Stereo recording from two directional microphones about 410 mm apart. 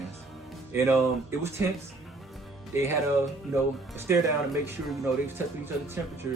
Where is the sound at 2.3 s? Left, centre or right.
Centre.